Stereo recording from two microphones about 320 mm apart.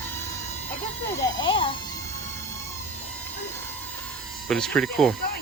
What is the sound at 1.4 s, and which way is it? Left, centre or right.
Speech, centre.